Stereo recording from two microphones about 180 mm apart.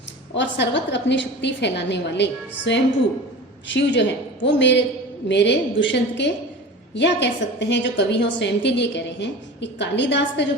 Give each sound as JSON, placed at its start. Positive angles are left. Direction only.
{"t": 0.3, "sound": "a woman's voice", "side_deg": 75}
{"t": 3.7, "sound": "a woman's voice", "side_deg": 85}